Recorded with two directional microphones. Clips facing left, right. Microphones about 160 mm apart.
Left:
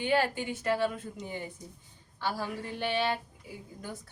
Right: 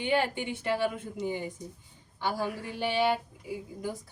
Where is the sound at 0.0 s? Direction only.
20° right (ahead or behind).